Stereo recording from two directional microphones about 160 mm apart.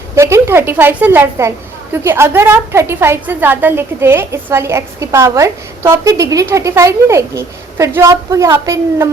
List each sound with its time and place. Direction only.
0.2 s a woman's voice: 20° right (ahead or behind)